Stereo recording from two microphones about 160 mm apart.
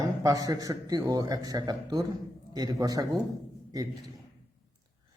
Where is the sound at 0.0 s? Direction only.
20° right (ahead or behind).